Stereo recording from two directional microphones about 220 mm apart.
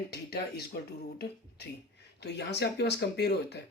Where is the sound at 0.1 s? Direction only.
45° left (ahead or behind).